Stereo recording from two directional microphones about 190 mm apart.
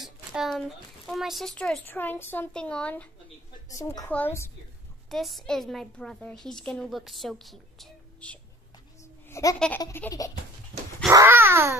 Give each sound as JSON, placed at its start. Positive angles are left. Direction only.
{"t": 0.0, "sound": "a woman's voice", "side_deg": 0}
{"t": 3.6, "sound": "a woman's voice", "side_deg": 15}
{"t": 5.1, "sound": "a woman's voice", "side_deg": 0}
{"t": 9.3, "sound": "a woman's voice", "side_deg": 15}
{"t": 11.1, "sound": "babbling", "side_deg": -15}